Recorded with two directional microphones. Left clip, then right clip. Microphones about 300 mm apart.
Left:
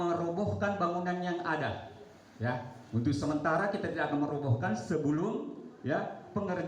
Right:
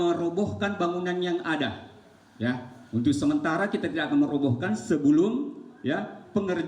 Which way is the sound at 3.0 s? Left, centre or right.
Right.